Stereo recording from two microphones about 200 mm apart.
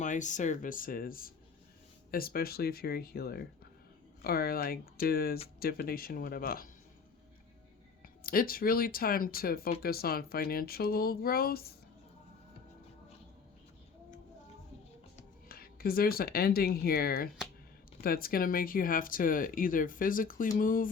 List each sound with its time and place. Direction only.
0.0 s speech: 40° left (ahead or behind)
8.2 s speech: 45° left (ahead or behind)
15.4 s speech: 50° left (ahead or behind)